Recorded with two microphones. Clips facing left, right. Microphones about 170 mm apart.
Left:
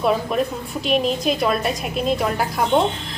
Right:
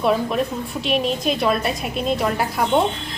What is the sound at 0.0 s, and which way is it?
A woman's voice, centre (ahead or behind).